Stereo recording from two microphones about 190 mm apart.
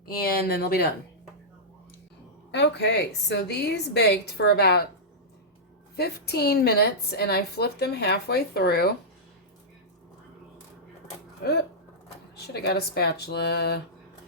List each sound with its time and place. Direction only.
0.2 s speech: 55° left (ahead or behind)
2.5 s a woman's voice: 65° left (ahead or behind)
6.0 s a woman's voice: 55° left (ahead or behind)
12.4 s a woman's voice: 60° left (ahead or behind)